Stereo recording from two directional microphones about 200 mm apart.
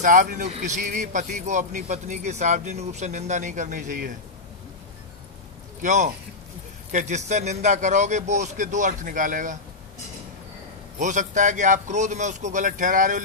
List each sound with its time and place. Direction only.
0.0 s a man's voice: 40° right (ahead or behind)
5.8 s a man's voice: 35° right (ahead or behind)
11.0 s a man's voice: 40° right (ahead or behind)